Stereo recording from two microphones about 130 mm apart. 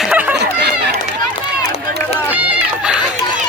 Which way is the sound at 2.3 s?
10° right (ahead or behind).